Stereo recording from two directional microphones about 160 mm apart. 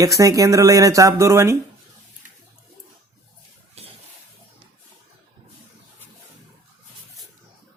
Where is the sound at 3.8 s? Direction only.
40° right (ahead or behind).